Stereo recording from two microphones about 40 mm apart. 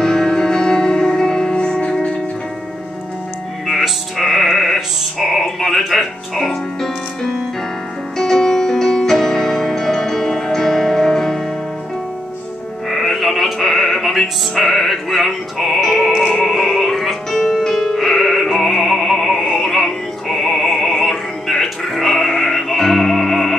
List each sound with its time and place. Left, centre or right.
0.0 s music: centre
3.6 s music: centre
12.9 s music: centre
16.1 s music: centre
16.3 s music: centre